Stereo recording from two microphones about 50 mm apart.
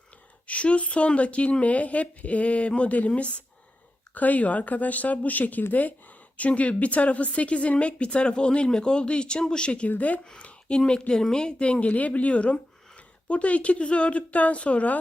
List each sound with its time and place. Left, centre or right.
0.4 s a woman's voice: left
4.1 s a woman's voice: left